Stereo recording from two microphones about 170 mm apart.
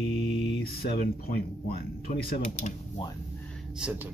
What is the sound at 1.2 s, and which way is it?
Speech, 60° left (ahead or behind).